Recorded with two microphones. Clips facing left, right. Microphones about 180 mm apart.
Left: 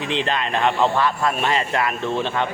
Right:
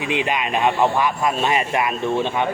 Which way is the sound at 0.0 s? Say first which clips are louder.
Right 1 dB; 10° right (ahead or behind).